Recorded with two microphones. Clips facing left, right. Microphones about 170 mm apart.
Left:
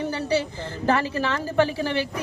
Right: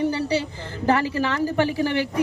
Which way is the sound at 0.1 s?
15° right (ahead or behind).